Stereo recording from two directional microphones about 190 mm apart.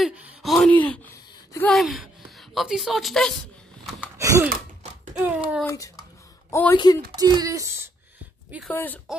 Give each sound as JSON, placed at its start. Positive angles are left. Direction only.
{"t": 0.0, "sound": "speech", "side_deg": 0}
{"t": 4.2, "sound": "gasp", "side_deg": -15}
{"t": 5.2, "sound": "speech", "side_deg": -5}
{"t": 5.6, "sound": "speech", "side_deg": 15}
{"t": 7.2, "sound": "speech", "side_deg": -20}
{"t": 8.6, "sound": "speech", "side_deg": 10}